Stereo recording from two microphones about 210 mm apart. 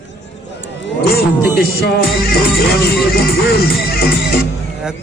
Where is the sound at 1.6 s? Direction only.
45° left (ahead or behind).